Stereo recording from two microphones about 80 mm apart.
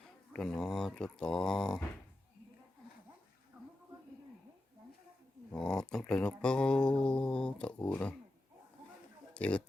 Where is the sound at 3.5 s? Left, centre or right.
Right.